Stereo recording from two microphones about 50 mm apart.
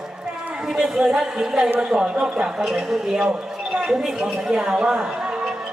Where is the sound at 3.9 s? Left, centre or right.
Centre.